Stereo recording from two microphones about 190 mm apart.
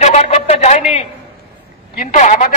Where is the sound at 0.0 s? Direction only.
35° left (ahead or behind).